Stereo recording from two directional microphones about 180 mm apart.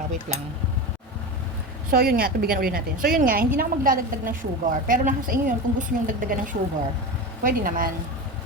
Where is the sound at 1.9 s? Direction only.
55° right (ahead or behind).